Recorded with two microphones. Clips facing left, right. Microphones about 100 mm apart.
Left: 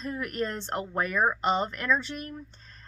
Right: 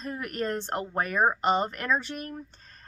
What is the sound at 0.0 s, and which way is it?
A woman's voice, 45° right (ahead or behind).